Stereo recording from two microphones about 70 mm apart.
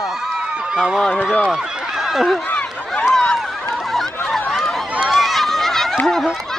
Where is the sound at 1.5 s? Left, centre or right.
Centre.